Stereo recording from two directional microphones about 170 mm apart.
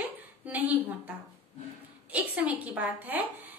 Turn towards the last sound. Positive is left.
turn(degrees=-10)  # may be behind; listen again after turning